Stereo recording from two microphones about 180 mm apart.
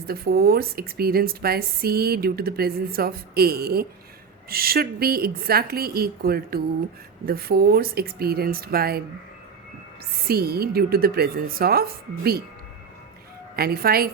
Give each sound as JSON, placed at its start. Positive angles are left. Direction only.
{"t": 0.0, "sound": "a woman's voice", "side_deg": -55}
{"t": 10.2, "sound": "a woman's voice", "side_deg": -60}
{"t": 13.6, "sound": "a woman's voice", "side_deg": -55}